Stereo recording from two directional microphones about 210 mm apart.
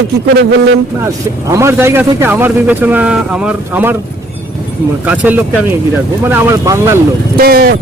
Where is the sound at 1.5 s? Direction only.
15° right (ahead or behind).